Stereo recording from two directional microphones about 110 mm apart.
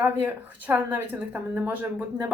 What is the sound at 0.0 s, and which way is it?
A woman's voice, 15° right (ahead or behind).